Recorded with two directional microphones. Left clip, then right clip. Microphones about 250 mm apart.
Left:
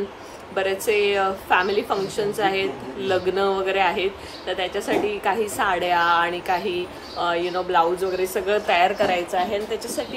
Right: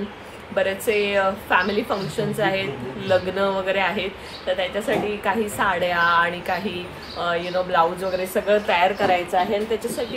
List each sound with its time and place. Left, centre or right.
0.6 s a woman's voice: centre